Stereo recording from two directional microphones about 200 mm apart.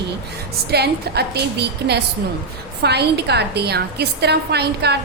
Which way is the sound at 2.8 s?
55° right (ahead or behind).